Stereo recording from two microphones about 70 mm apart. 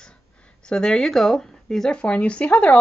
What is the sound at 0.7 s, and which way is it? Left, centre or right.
Speech, centre.